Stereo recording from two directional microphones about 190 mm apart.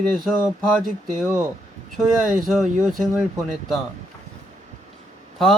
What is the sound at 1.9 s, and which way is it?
Speech, centre (ahead or behind).